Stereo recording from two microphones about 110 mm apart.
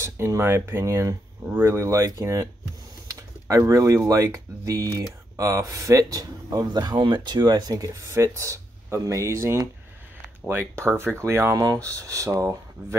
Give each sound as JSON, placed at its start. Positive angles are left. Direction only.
{"t": 0.0, "sound": "speech", "side_deg": -25}